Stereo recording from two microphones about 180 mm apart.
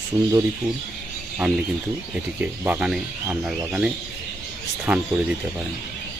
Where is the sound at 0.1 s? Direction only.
20° right (ahead or behind).